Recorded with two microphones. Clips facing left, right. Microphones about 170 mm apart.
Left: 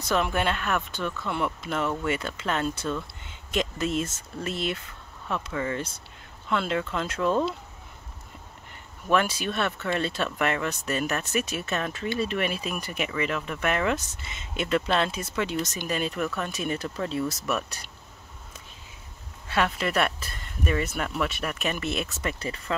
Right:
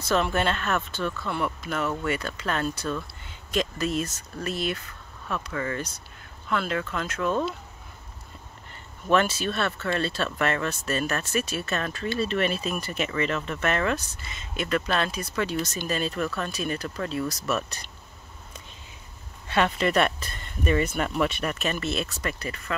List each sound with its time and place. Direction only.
0.0 s speech: 15° left (ahead or behind)
9.0 s speech: 10° left (ahead or behind)
17.6 s speech: 10° left (ahead or behind)
19.4 s speech: 5° left (ahead or behind); by 22.8 s 25° left (ahead or behind)